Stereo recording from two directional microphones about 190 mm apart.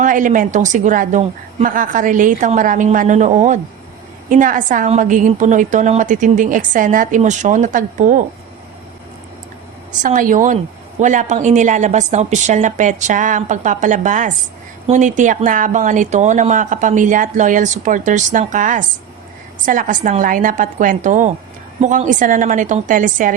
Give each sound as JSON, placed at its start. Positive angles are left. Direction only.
{"t": 0.0, "sound": "a woman's voice", "side_deg": -45}
{"t": 10.0, "sound": "a woman's voice", "side_deg": -45}